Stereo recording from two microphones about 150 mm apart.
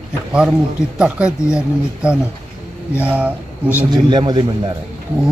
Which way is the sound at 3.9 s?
30° right (ahead or behind).